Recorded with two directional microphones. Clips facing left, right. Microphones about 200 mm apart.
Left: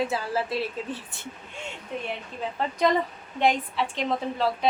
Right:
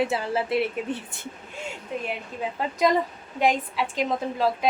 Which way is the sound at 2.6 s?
10° right (ahead or behind).